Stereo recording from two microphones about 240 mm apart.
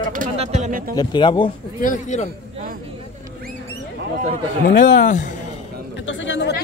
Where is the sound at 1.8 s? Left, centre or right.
Left.